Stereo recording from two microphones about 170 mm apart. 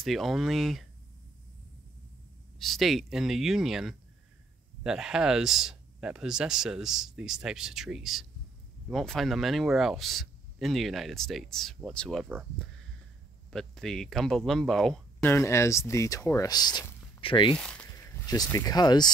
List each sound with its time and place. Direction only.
0.0 s speech: centre (ahead or behind)
2.6 s speech: centre (ahead or behind)
13.5 s speech: 5° left (ahead or behind)
15.3 s speech: 15° left (ahead or behind)
17.6 s speech: 5° left (ahead or behind)
17.8 s speech: 15° left (ahead or behind)